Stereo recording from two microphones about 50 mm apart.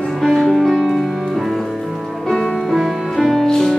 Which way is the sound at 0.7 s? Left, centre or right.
Centre.